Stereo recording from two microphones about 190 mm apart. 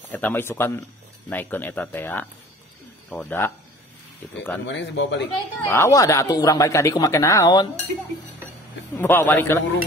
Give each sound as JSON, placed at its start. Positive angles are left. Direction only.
{"t": 0.1, "sound": "speech", "side_deg": 10}
{"t": 4.6, "sound": "speech", "side_deg": 70}
{"t": 5.7, "sound": "speech", "side_deg": 15}
{"t": 8.9, "sound": "speech", "side_deg": 10}